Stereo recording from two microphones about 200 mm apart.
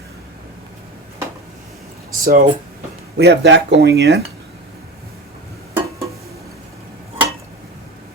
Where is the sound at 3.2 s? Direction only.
60° right (ahead or behind).